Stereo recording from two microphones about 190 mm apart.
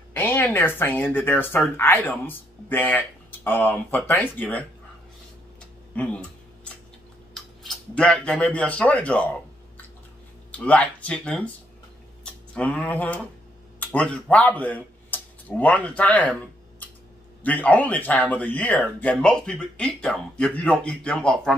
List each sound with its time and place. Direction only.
0.1 s speech: 10° left (ahead or behind)
5.6 s a sound: 5° left (ahead or behind)
7.3 s speech: 5° left (ahead or behind)
10.5 s speech: 5° left (ahead or behind)
12.5 s speech: 5° left (ahead or behind)
17.4 s speech: 10° left (ahead or behind)